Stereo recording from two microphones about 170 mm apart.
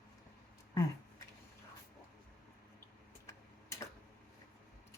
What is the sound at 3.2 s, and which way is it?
Tick-tock, 15° left (ahead or behind).